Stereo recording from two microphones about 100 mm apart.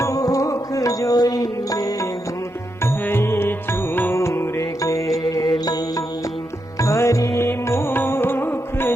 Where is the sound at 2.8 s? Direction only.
25° left (ahead or behind).